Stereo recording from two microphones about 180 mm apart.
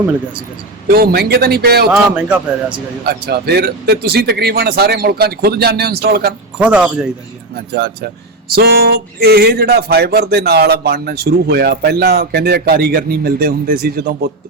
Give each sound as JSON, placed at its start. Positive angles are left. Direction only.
{"t": 0.9, "sound": "speech", "side_deg": -60}
{"t": 1.9, "sound": "speech", "side_deg": -5}
{"t": 3.1, "sound": "speech", "side_deg": -60}
{"t": 6.6, "sound": "speech", "side_deg": -5}
{"t": 7.5, "sound": "speech", "side_deg": -65}